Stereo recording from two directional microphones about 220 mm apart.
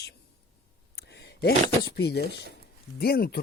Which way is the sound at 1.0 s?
50° left (ahead or behind).